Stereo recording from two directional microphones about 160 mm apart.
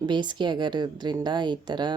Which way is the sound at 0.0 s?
30° right (ahead or behind).